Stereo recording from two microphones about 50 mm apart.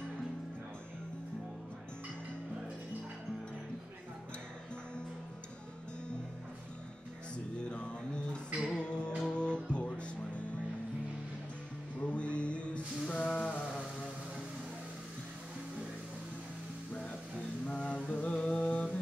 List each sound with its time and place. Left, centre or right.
7.7 s music: left
12.0 s music: left
16.9 s music: left
17.6 s mantra: left